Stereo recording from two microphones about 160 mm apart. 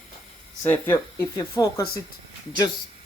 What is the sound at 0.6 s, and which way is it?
Speech, 15° left (ahead or behind).